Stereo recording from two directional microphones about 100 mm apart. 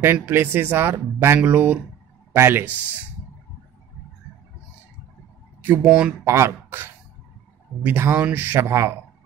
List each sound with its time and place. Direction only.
0.0 s speech: 20° right (ahead or behind)
5.6 s speech: 15° right (ahead or behind)
6.2 s speech: 30° right (ahead or behind)